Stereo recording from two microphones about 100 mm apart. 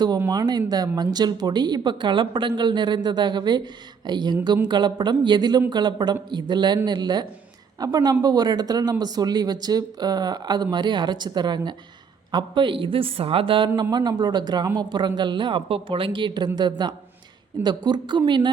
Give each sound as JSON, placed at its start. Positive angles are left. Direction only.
{"t": 0.3, "sound": "a woman's voice", "side_deg": -40}
{"t": 13.9, "sound": "speech", "side_deg": -45}